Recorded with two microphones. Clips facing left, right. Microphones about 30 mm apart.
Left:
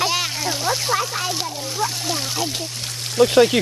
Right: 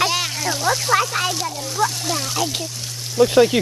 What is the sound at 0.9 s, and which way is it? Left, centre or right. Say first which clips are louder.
Speech: right 4 dB; right.